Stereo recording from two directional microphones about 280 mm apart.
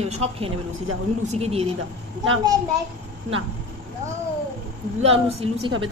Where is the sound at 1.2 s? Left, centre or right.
Right.